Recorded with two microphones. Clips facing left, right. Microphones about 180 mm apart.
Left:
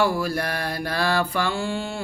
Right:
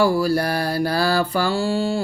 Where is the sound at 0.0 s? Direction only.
35° right (ahead or behind).